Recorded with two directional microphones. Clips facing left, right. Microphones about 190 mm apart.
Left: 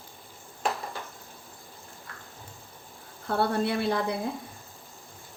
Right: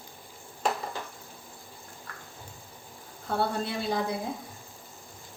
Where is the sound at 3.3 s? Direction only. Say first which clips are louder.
Left 3 dB; 65° left (ahead or behind).